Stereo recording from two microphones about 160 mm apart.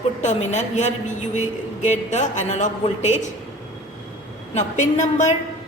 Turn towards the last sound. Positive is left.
turn(degrees=45)  # may be behind; listen again after turning